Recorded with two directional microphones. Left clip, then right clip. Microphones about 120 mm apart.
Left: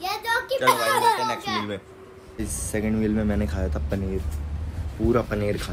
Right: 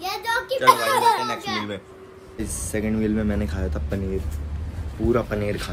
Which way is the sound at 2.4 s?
10° right (ahead or behind).